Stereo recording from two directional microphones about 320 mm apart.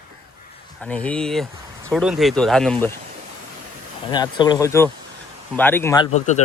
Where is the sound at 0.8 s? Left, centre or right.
Centre.